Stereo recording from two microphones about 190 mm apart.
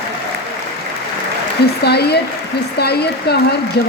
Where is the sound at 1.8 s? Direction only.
60° left (ahead or behind).